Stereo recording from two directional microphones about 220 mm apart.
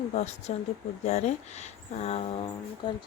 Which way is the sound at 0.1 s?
30° left (ahead or behind).